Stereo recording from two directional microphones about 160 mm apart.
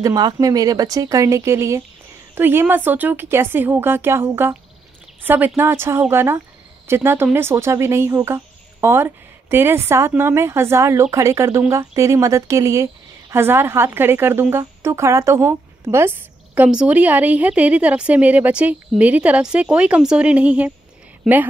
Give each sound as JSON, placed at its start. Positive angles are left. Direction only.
{"t": 0.0, "sound": "speech", "side_deg": -25}